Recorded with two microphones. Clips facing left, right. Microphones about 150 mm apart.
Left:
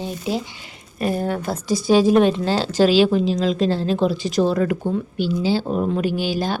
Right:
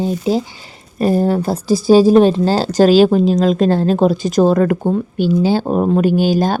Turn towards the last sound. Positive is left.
turn(degrees=-45)  # may be behind; listen again after turning